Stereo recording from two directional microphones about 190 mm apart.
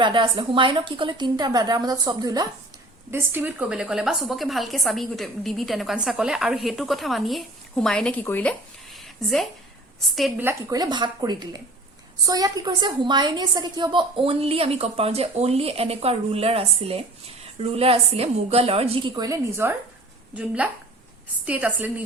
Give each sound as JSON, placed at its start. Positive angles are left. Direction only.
{"t": 0.0, "sound": "a woman's voice", "side_deg": -25}
{"t": 10.4, "sound": "a woman's voice", "side_deg": -20}